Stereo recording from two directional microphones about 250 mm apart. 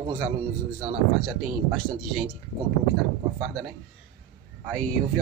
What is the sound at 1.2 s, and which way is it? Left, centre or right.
A man's voice, centre.